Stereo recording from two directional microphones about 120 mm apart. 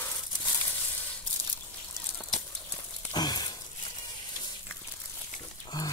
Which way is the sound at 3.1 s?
35° left (ahead or behind).